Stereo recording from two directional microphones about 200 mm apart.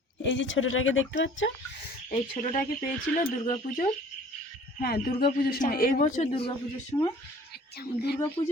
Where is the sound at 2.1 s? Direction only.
35° left (ahead or behind).